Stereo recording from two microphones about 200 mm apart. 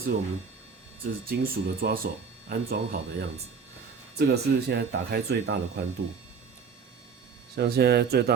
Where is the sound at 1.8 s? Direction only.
50° right (ahead or behind).